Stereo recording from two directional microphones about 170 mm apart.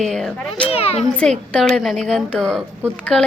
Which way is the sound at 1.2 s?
5° left (ahead or behind).